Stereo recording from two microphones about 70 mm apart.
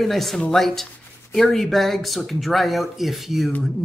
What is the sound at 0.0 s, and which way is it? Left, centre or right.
Speech, centre.